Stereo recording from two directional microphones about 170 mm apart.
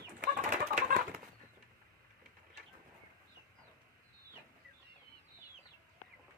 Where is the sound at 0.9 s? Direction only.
60° right (ahead or behind).